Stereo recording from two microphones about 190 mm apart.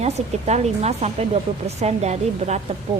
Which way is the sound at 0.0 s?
35° right (ahead or behind).